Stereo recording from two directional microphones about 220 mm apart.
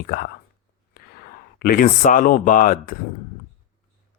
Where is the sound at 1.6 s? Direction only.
40° left (ahead or behind).